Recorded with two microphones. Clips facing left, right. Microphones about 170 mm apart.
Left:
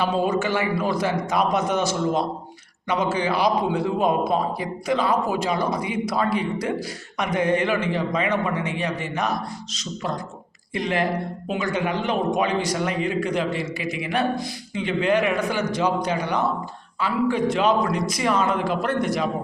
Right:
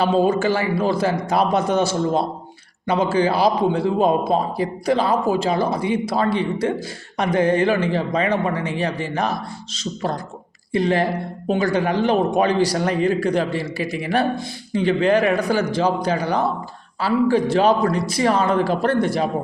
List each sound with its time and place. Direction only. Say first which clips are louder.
0.0 s a man's voice: right 5 dB; 30° right (ahead or behind)